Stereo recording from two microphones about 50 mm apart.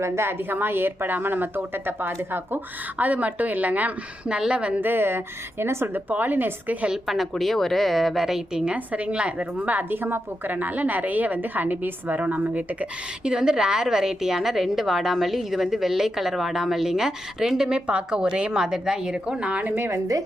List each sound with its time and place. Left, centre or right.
0.0 s a woman's voice: right
3.0 s a woman's voice: right
4.3 s a woman's voice: centre
4.8 s a woman's voice: right
6.9 s a woman's voice: centre
8.5 s a woman's voice: centre
9.7 s a woman's voice: right
13.2 s a woman's voice: centre
19.5 s a woman's voice: right
19.7 s a woman's voice: right